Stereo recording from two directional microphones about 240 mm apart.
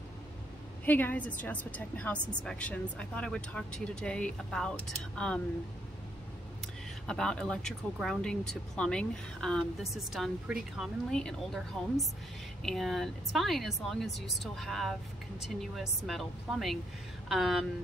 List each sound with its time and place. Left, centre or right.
0.8 s speech: centre
7.1 s speech: centre